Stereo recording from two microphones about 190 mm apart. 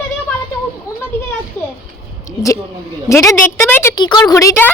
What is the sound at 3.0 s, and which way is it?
A woman's voice, 15° left (ahead or behind).